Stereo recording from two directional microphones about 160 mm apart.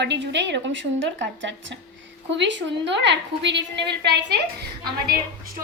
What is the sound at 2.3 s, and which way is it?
A woman's voice, 90° right.